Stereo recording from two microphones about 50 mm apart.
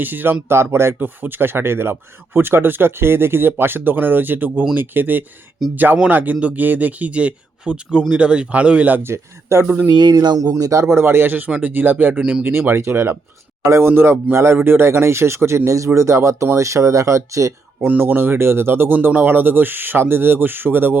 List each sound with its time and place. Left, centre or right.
0.0 s speech: right
0.4 s speech: right
0.9 s speech: right
9.0 s speech: right
10.5 s speech: right
12.2 s speech: right
12.5 s speech: right
12.7 s a man's voice: right
17.7 s speech: right
18.0 s speech: right